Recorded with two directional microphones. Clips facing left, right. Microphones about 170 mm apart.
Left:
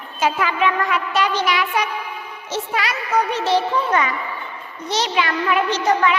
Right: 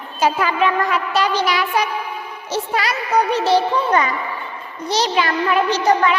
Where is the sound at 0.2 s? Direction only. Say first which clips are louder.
Right 2 dB; 35° right (ahead or behind).